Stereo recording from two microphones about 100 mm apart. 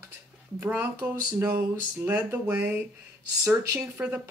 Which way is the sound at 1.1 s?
25° right (ahead or behind).